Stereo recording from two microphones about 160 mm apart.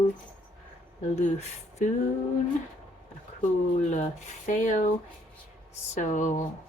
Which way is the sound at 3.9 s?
50° left (ahead or behind).